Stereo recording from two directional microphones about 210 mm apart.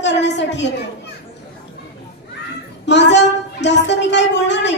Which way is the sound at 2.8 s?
55° left (ahead or behind).